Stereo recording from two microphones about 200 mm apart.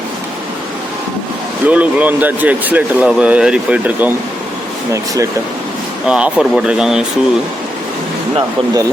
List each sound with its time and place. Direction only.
1.6 s speech: 5° right (ahead or behind)
6.1 s speech: 5° right (ahead or behind)
8.4 s speech: 15° right (ahead or behind)